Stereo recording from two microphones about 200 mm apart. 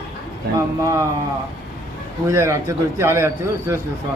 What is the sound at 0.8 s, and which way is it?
Speech, 15° right (ahead or behind).